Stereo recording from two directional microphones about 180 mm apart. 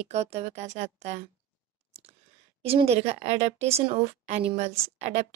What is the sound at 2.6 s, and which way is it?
A woman's voice, 35° right (ahead or behind).